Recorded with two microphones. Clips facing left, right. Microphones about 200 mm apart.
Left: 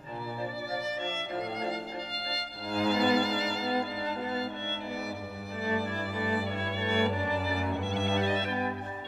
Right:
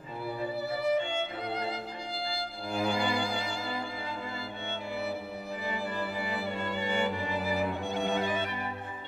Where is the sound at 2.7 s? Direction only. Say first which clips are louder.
Left 4 dB; 10° right (ahead or behind).